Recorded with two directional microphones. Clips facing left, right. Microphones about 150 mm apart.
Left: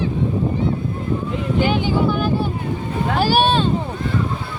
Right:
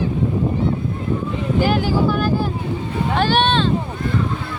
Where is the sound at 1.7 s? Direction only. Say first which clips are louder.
Right 1 dB; centre (ahead or behind).